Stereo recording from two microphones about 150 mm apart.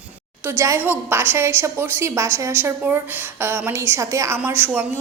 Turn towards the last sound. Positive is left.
turn(degrees=-10)  # may be behind; listen again after turning